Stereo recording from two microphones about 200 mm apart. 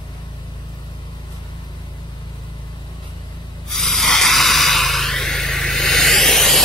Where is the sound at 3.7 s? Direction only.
Centre (ahead or behind).